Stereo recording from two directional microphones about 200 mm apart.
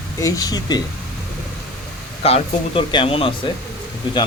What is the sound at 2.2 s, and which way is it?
Speech, 30° left (ahead or behind).